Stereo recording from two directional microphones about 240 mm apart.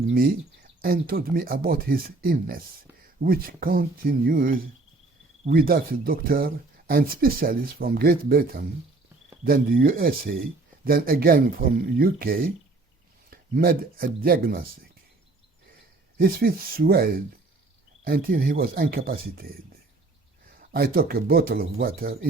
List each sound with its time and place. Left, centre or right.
0.1 s speech: right
16.1 s speech: right
20.6 s speech: right